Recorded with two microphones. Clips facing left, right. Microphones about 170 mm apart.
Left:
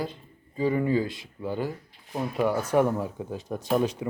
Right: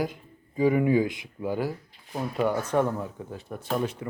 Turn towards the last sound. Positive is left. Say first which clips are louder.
# left 4 dB
turn(degrees=15)  # may be behind; listen again after turning